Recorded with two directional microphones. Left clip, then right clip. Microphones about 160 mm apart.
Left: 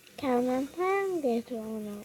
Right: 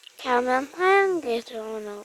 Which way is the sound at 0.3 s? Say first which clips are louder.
Right 6 dB; 35° right (ahead or behind).